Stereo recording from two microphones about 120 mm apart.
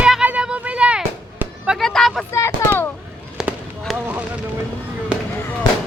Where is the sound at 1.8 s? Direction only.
5° left (ahead or behind).